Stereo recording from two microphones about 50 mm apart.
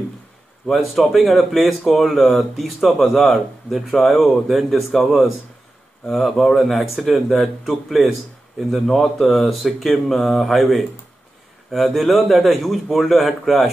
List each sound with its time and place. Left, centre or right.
0.7 s speech: centre